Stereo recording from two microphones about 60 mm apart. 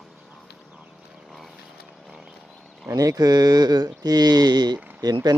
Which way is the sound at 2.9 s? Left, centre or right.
Right.